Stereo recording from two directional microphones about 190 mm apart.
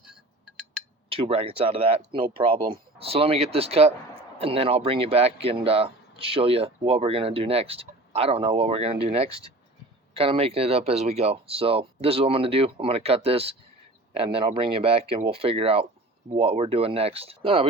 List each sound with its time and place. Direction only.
1.1 s speech: 30° right (ahead or behind)